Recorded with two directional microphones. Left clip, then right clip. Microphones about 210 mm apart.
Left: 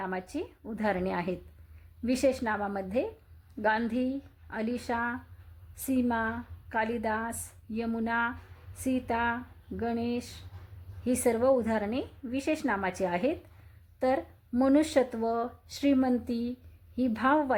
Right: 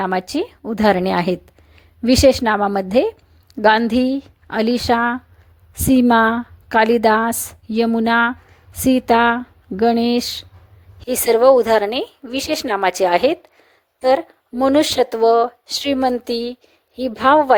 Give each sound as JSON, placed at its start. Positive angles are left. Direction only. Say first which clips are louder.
{"t": 0.0, "sound": "a woman's voice", "louder": "right 15 dB", "side_deg": -40}